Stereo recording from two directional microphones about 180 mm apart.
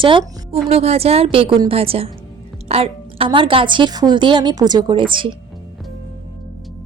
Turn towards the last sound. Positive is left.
turn(degrees=-25)  # may be behind; listen again after turning